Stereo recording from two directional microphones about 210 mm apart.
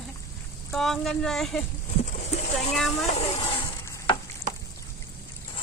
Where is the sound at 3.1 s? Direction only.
30° left (ahead or behind).